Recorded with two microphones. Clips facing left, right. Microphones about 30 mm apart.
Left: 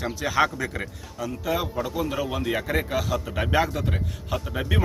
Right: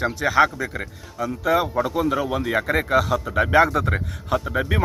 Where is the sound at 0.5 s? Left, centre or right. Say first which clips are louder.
Right 2 dB; centre.